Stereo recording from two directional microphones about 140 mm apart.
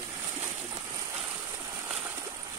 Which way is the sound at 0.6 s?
35° right (ahead or behind).